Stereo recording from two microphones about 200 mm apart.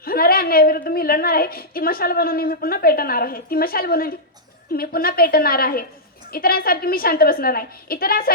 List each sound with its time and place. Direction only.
0.0 s a woman's voice: 50° left (ahead or behind)